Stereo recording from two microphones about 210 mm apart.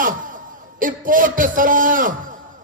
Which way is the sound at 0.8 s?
40° right (ahead or behind).